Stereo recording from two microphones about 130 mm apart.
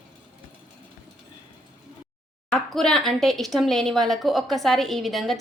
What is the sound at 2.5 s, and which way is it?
Speech, centre (ahead or behind).